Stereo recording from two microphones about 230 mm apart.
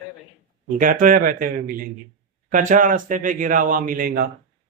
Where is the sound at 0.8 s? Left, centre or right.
Right.